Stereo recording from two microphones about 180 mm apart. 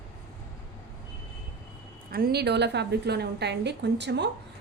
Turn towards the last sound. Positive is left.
turn(degrees=-70)  # may be behind; listen again after turning